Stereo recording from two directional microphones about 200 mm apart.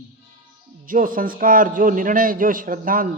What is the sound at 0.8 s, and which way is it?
A man's voice, 45° right (ahead or behind).